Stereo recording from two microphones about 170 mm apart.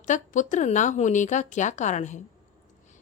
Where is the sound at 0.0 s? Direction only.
45° left (ahead or behind).